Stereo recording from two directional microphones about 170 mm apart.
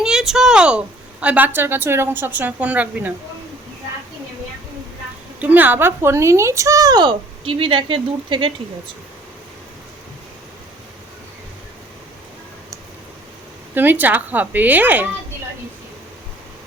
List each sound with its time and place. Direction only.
0.0 s a sound: 5° right (ahead or behind)
1.2 s a woman's voice: 10° right (ahead or behind)
5.4 s speech: 10° right (ahead or behind); by 8.5 s 30° right (ahead or behind)
13.7 s a woman's voice: 10° right (ahead or behind)